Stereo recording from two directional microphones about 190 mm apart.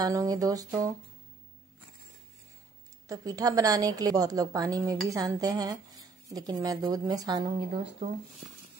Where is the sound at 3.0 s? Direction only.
20° right (ahead or behind).